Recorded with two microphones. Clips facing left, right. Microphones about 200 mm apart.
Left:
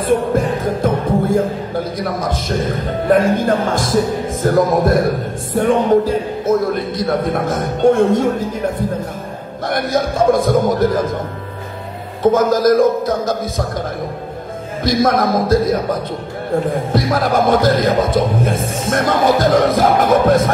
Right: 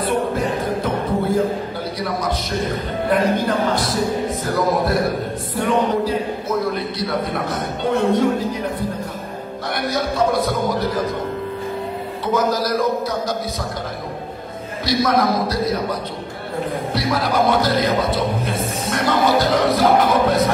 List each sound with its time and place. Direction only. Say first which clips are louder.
0.0 s music: left 5 dB; 50° left (ahead or behind)
2.0 s speech: left 2 dB; 45° left (ahead or behind)
9.7 s speech: left 5 dB; 50° left (ahead or behind)
12.2 s speech: left 7 dB; 50° left (ahead or behind)
14.9 s speech: left 3 dB; 50° left (ahead or behind)